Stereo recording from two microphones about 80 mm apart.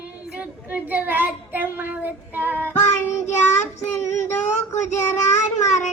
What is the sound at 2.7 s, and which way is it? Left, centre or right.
Child singing, left.